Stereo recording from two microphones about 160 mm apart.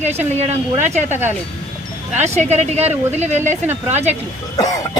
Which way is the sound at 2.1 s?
45° right (ahead or behind).